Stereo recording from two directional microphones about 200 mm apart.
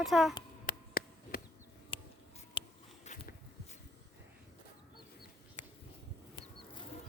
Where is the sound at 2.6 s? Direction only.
25° left (ahead or behind).